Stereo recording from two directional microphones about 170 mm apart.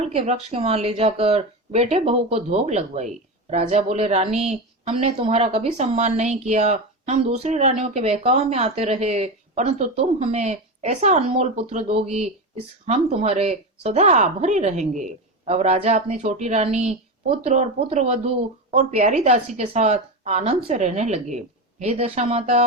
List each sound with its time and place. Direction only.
0.0 s a woman's voice: 35° right (ahead or behind)